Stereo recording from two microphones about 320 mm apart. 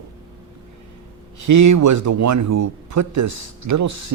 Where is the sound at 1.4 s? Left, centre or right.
Right.